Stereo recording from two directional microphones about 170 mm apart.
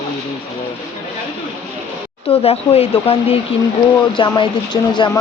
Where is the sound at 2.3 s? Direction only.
35° left (ahead or behind).